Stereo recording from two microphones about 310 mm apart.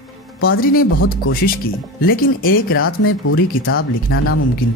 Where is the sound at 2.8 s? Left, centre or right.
Left.